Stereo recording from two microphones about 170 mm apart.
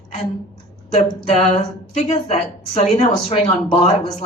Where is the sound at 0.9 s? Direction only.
40° left (ahead or behind).